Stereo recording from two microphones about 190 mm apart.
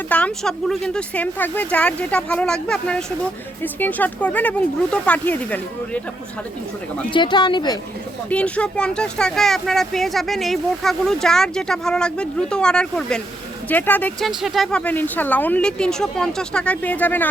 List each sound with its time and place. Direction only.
0.1 s speech: 5° left (ahead or behind)
7.1 s speech: 25° left (ahead or behind)
8.3 s speech: 5° left (ahead or behind)